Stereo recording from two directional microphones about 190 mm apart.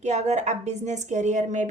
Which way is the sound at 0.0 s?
35° right (ahead or behind).